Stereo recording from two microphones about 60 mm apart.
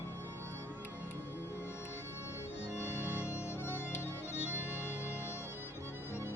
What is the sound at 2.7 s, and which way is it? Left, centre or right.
Accordion, left.